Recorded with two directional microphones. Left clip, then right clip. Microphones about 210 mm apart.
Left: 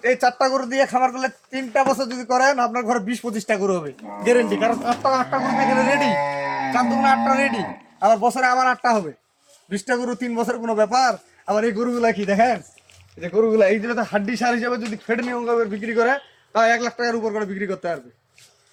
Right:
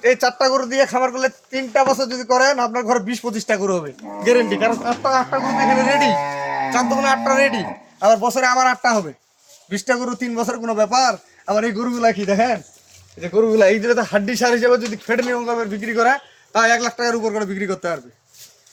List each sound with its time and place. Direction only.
0.0 s speech: 25° right (ahead or behind)
6.1 s speech: 50° left (ahead or behind)
6.7 s speech: 40° right (ahead or behind); by 12.5 s 10° right (ahead or behind)
13.1 s speech: 20° right (ahead or behind)
13.6 s a man's voice: 40° right (ahead or behind); by 18.0 s 60° right (ahead or behind)